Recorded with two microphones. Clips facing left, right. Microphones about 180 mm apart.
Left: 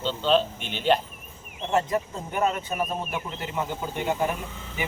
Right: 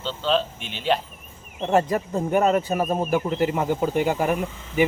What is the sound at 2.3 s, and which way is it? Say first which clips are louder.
A man's voice: right 6 dB; 45° right (ahead or behind).